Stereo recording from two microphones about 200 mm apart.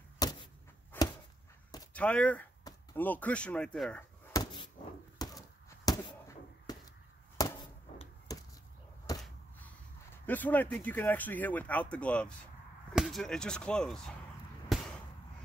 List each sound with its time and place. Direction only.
0.2 s vehicle: 20° left (ahead or behind)
0.9 s a sound: 10° left (ahead or behind)
2.0 s speech: 5° left (ahead or behind)
4.3 s a sound: 20° left (ahead or behind)
10.2 s speech: 10° left (ahead or behind)
14.7 s basketball bounce: centre (ahead or behind)